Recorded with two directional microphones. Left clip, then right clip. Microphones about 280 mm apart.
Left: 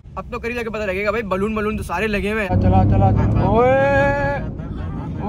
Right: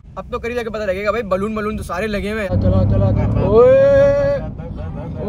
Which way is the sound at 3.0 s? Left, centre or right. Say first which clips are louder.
Left 1 dB; left.